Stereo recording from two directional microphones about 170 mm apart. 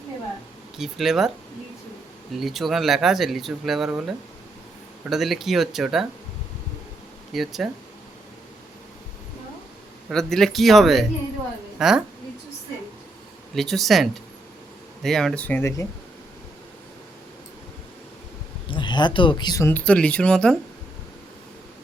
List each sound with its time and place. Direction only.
0.8 s speech: centre (ahead or behind)
2.4 s speech: centre (ahead or behind)
7.3 s speech: centre (ahead or behind)
10.1 s speech: centre (ahead or behind)
13.6 s speech: centre (ahead or behind)
18.8 s speech: 25° left (ahead or behind)
19.7 s speech: 5° left (ahead or behind)